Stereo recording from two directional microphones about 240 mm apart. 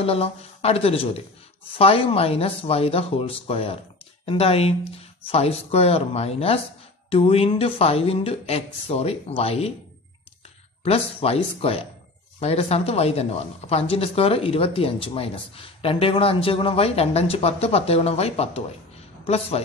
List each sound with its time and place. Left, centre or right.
0.0 s speech: left
10.8 s speech: left